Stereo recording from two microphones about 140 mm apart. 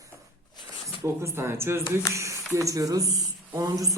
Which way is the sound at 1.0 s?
20° right (ahead or behind).